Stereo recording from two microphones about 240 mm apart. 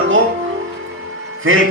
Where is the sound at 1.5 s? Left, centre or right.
Right.